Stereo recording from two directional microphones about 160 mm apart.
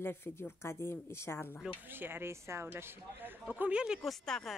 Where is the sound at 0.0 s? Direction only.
15° left (ahead or behind).